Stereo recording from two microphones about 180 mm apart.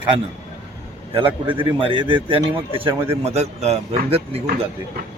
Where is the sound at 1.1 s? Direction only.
30° right (ahead or behind).